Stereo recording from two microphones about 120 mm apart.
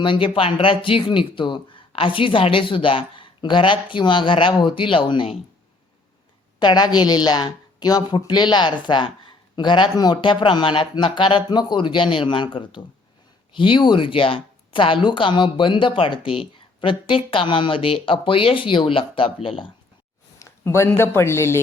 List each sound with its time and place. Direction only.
0.0 s speech: 45° left (ahead or behind)
6.6 s speech: 35° left (ahead or behind)
20.4 s speech: 20° left (ahead or behind)